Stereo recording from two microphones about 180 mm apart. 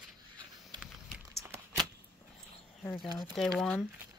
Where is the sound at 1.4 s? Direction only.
15° right (ahead or behind).